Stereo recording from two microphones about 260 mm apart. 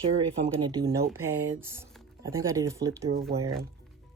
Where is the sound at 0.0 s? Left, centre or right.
Right.